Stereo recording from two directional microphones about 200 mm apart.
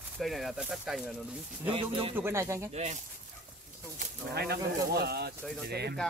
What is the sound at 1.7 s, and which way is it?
Speech, 25° right (ahead or behind).